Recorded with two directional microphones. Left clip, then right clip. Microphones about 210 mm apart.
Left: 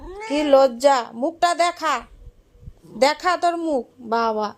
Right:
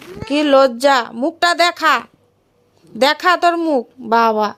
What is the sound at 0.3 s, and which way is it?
A woman's voice, 25° right (ahead or behind).